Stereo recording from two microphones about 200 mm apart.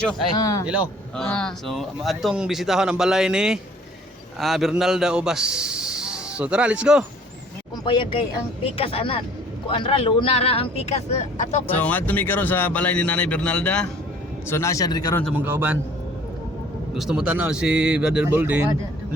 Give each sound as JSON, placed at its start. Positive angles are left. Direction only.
{"t": 0.3, "sound": "speech", "side_deg": 20}
{"t": 0.6, "sound": "a man's voice", "side_deg": -5}
{"t": 7.9, "sound": "speech", "side_deg": 25}
{"t": 11.7, "sound": "speech", "side_deg": 10}
{"t": 15.2, "sound": "speech", "side_deg": -5}
{"t": 16.9, "sound": "a man's voice", "side_deg": 0}